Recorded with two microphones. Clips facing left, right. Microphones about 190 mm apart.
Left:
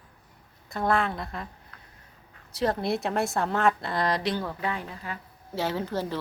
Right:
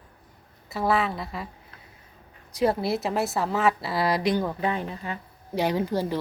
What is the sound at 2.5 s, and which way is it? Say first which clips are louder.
Speech: right 3 dB; 10° right (ahead or behind).